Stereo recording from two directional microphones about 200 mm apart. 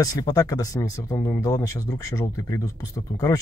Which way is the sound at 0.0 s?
15° left (ahead or behind).